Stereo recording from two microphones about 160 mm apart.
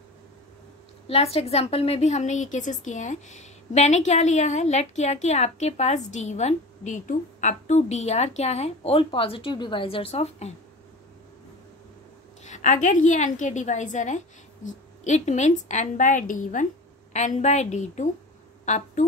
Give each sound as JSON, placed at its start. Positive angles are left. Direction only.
{"t": 1.0, "sound": "a woman's voice", "side_deg": 40}
{"t": 12.4, "sound": "a woman's voice", "side_deg": 50}